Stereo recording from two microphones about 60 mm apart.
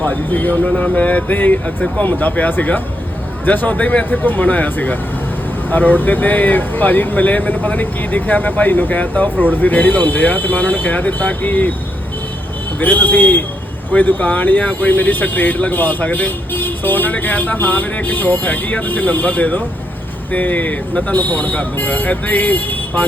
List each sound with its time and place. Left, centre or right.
0.0 s speech: left
12.8 s speech: left